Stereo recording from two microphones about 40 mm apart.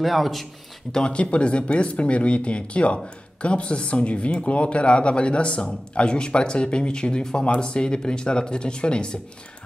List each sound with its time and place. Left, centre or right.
0.0 s speech: centre
0.9 s speech: left